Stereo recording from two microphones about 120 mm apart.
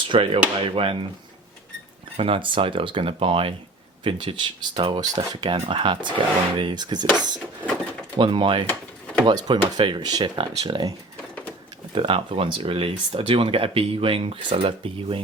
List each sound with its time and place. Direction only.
0.0 s speech: 45° right (ahead or behind)
2.1 s speech: 45° right (ahead or behind)
8.2 s speech: 45° right (ahead or behind)
11.9 s speech: 45° right (ahead or behind)